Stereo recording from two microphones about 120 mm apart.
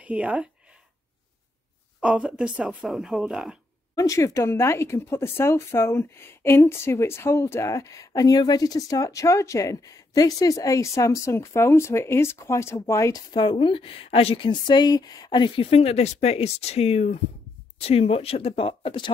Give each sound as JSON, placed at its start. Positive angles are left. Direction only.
{"t": 0.0, "sound": "speech", "side_deg": -10}
{"t": 2.0, "sound": "a woman's voice", "side_deg": -5}
{"t": 3.9, "sound": "speech", "side_deg": 25}
{"t": 13.4, "sound": "a woman's voice", "side_deg": 45}